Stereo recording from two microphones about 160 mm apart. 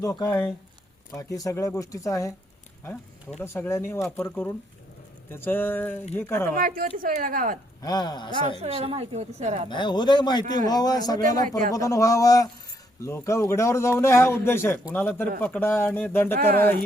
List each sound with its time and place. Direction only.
0.0 s a man's voice: 20° left (ahead or behind)
6.5 s speech: 60° right (ahead or behind)
7.8 s speech: 25° left (ahead or behind)
8.6 s a woman's voice: 40° right (ahead or behind)
9.6 s a man's voice: 30° left (ahead or behind); by 15.6 s 5° left (ahead or behind)
15.6 s a man's voice: 15° left (ahead or behind)